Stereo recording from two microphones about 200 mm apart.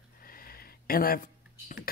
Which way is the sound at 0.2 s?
45° left (ahead or behind).